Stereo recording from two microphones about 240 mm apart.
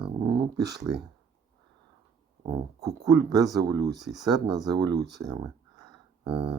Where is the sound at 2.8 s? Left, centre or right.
Centre.